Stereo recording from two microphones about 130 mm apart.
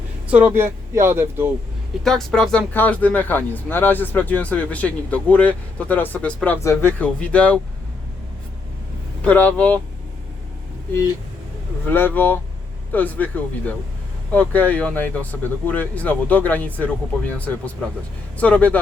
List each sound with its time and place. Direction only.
0.3 s speech: 10° right (ahead or behind)
2.0 s speech: 5° left (ahead or behind)
9.2 s speech: 10° left (ahead or behind)
11.9 s speech: 15° left (ahead or behind)
18.3 s speech: 10° left (ahead or behind)